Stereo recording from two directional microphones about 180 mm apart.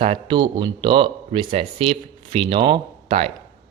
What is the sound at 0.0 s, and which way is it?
Speech, 30° right (ahead or behind).